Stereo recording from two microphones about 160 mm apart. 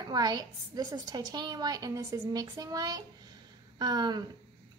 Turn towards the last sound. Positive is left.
turn(degrees=-25)  # may be behind; listen again after turning